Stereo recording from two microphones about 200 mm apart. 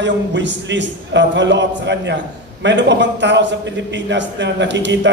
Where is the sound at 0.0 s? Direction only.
65° right (ahead or behind).